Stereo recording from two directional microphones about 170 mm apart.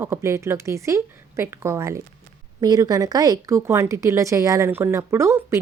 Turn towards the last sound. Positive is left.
turn(degrees=-15)  # may be behind; listen again after turning